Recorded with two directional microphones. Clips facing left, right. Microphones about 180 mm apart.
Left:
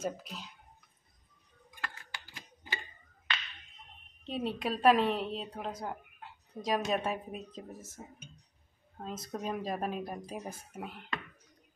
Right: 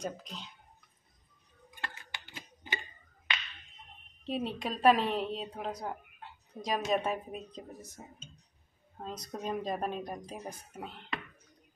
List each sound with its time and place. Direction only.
0.0 s a woman's voice: 5° left (ahead or behind)
1.8 s a sound: 25° right (ahead or behind)
4.3 s a woman's voice: centre (ahead or behind)